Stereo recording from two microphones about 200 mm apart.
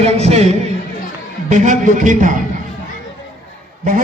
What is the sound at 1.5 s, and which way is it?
Speech, 35° right (ahead or behind).